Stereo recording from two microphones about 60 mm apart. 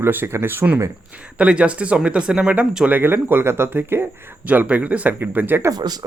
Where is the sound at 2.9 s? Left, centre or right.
Right.